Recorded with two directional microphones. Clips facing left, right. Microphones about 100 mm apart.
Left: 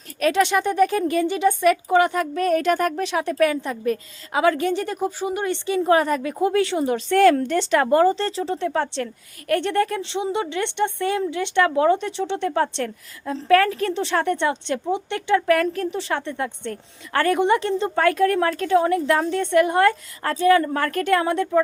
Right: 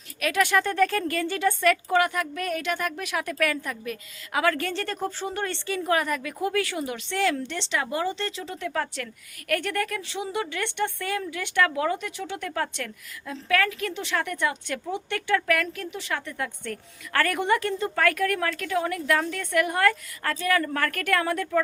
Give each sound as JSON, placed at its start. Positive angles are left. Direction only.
{"t": 0.2, "sound": "speech", "side_deg": 30}
{"t": 3.0, "sound": "a woman's voice", "side_deg": 30}